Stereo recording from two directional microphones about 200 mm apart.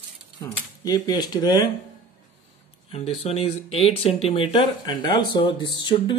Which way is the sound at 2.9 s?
30° left (ahead or behind).